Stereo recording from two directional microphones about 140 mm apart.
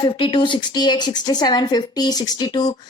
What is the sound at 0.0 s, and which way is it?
A woman's voice, 35° left (ahead or behind).